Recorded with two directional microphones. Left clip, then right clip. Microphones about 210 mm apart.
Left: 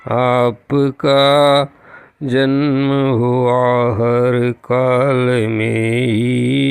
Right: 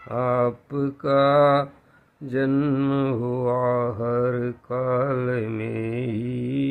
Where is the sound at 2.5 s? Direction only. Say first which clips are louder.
Left 7 dB; 25° left (ahead or behind).